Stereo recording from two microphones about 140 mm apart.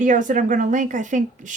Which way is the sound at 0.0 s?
65° right (ahead or behind).